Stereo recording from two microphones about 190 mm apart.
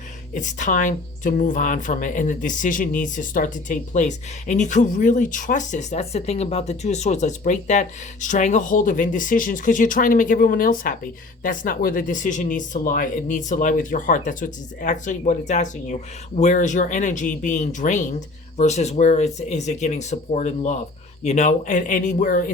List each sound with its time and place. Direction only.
0.3 s speech: 40° left (ahead or behind)